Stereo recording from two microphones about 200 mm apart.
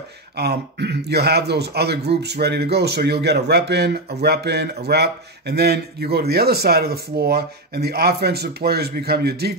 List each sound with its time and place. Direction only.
0.4 s a man's voice: 55° right (ahead or behind)